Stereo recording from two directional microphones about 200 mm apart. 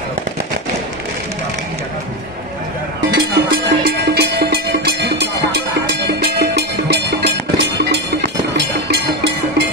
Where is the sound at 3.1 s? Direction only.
55° right (ahead or behind).